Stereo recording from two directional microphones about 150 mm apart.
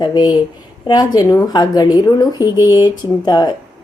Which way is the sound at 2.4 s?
20° right (ahead or behind).